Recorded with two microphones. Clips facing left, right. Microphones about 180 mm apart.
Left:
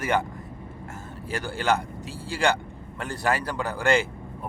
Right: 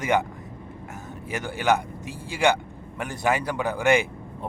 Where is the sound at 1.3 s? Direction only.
20° right (ahead or behind).